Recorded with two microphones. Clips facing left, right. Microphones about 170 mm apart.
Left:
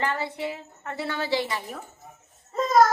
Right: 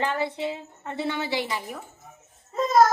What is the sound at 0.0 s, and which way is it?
A woman's voice, 15° right (ahead or behind).